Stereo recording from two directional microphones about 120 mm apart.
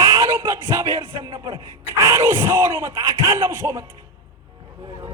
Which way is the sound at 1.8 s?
20° right (ahead or behind).